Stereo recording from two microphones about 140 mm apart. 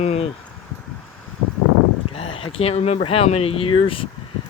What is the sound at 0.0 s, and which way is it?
Vehicle, 50° left (ahead or behind).